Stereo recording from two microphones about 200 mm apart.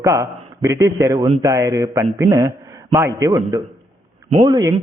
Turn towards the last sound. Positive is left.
turn(degrees=-20)  # may be behind; listen again after turning